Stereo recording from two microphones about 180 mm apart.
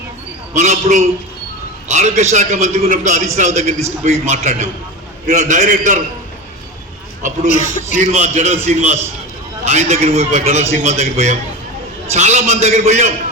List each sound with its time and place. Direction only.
0.5 s a man's voice: 45° right (ahead or behind)
7.4 s a man's voice: 45° left (ahead or behind)
7.9 s a man's voice: 40° right (ahead or behind)